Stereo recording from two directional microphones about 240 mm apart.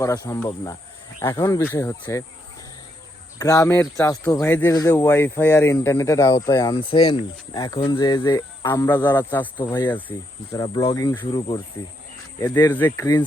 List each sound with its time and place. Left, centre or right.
0.0 s speech: centre
3.3 s speech: centre